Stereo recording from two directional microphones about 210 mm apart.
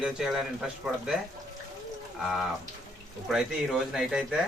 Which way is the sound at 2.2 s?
Centre (ahead or behind).